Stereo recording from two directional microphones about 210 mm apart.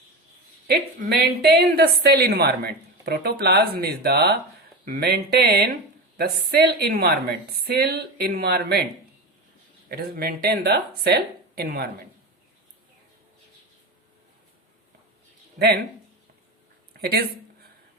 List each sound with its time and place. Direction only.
1.0 s a woman's voice: 40° right (ahead or behind)
9.9 s a woman's voice: 45° right (ahead or behind)
15.5 s speech: 50° right (ahead or behind)
17.0 s speech: 50° right (ahead or behind)